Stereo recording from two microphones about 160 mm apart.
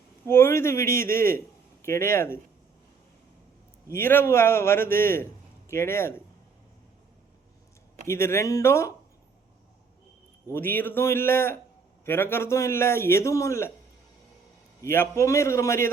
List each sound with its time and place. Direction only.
0.3 s a man's voice: 15° left (ahead or behind)
3.8 s a man's voice: 15° left (ahead or behind)
8.0 s a man's voice: 15° left (ahead or behind)
10.5 s a man's voice: 15° left (ahead or behind)
14.8 s a man's voice: 15° left (ahead or behind)